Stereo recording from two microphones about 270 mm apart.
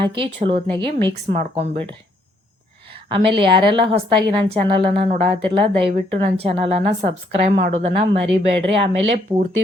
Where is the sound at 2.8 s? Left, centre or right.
Centre.